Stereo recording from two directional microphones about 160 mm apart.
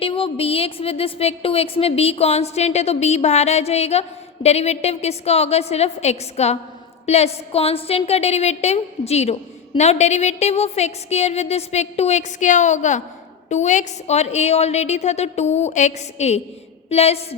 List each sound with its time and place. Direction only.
0.0 s a woman's voice: 35° left (ahead or behind)